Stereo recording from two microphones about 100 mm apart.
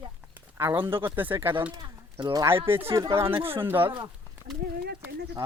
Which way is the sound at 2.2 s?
40° right (ahead or behind).